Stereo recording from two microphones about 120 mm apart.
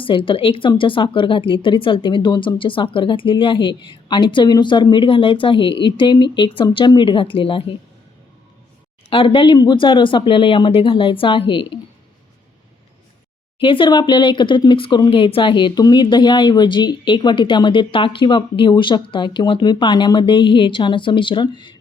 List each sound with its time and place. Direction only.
0.0 s speech: 45° left (ahead or behind)
9.0 s speech: 50° left (ahead or behind)
13.6 s speech: 45° left (ahead or behind)